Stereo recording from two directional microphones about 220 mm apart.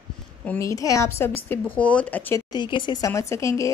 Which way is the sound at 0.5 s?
15° left (ahead or behind).